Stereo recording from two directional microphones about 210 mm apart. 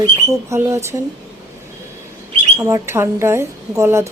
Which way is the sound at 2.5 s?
15° right (ahead or behind).